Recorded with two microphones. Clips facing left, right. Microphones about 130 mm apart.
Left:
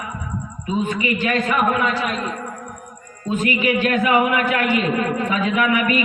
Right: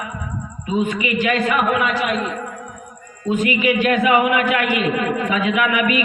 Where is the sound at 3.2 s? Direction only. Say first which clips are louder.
Right 2 dB; 15° right (ahead or behind).